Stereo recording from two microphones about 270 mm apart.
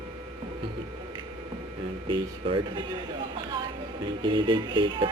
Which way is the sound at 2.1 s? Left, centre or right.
Centre.